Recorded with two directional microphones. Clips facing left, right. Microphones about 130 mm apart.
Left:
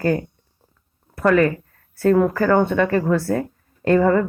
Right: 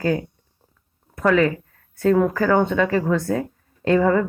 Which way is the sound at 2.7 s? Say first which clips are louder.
Left 1 dB; 50° left (ahead or behind).